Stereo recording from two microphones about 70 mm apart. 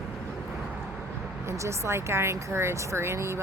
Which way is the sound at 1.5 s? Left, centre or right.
Right.